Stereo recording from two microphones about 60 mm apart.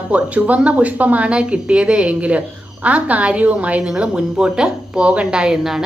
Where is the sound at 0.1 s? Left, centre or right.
Right.